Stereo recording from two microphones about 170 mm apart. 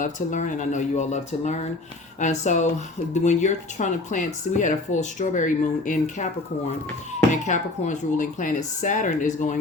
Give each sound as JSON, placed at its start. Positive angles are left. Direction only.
{"t": 0.0, "sound": "speech", "side_deg": 50}
{"t": 7.4, "sound": "speech", "side_deg": 45}